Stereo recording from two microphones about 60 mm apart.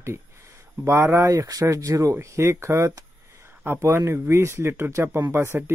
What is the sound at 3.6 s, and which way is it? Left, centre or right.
Speech, right.